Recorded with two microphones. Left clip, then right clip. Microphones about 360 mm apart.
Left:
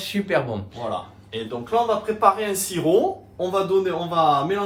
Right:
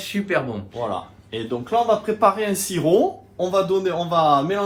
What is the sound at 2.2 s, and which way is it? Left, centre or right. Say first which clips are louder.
A man's voice: even; right.